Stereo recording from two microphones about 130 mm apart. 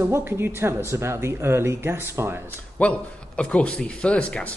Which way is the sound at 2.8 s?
10° left (ahead or behind).